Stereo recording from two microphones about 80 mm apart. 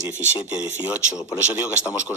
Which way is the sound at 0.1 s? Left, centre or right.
Left.